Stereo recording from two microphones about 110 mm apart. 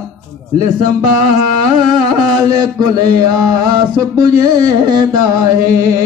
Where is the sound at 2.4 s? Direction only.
35° right (ahead or behind).